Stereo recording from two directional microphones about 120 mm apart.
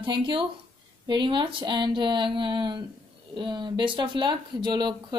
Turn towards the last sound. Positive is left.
turn(degrees=-35)  # may be behind; listen again after turning